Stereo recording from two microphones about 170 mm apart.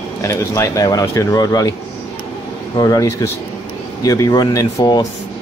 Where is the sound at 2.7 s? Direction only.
20° left (ahead or behind).